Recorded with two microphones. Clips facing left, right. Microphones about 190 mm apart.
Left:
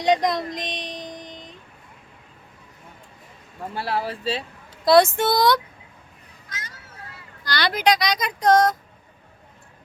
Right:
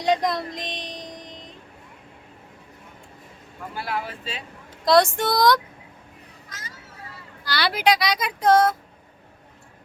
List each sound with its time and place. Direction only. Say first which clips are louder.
0.0 s music: left 2 dB; centre (ahead or behind)
3.8 s speech: left 3 dB; 35° left (ahead or behind)
5.1 s speech: even; 5° left (ahead or behind)
6.5 s children playing: left 3 dB; centre (ahead or behind)
7.4 s speech: even; 5° right (ahead or behind)